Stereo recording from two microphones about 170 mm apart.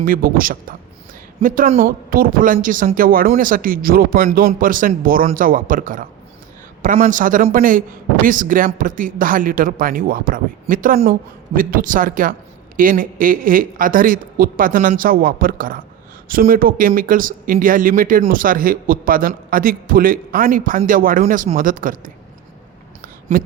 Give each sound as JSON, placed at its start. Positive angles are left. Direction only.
{"t": 0.0, "sound": "a man's voice", "side_deg": -55}